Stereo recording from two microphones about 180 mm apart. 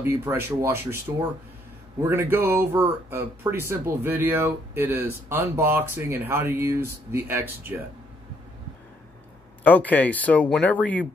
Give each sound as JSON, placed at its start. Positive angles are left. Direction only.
{"t": 0.0, "sound": "speech", "side_deg": -15}
{"t": 2.0, "sound": "speech", "side_deg": -15}
{"t": 9.6, "sound": "speech", "side_deg": 10}